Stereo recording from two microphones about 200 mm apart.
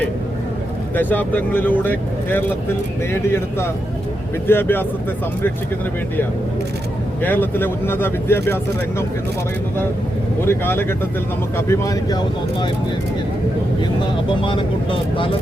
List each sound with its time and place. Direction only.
0.9 s speech: 10° left (ahead or behind)
7.2 s speech: 10° left (ahead or behind)
10.4 s speech: 10° left (ahead or behind)
14.4 s speech: 25° left (ahead or behind)